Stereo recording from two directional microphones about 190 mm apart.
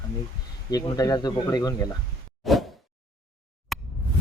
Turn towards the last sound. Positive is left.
turn(degrees=0)  # may be behind; listen again after turning